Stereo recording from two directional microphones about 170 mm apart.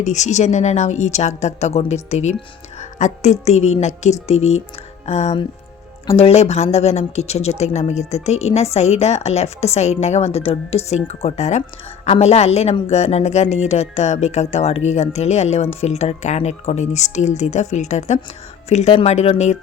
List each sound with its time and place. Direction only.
0.0 s a woman's voice: 45° left (ahead or behind)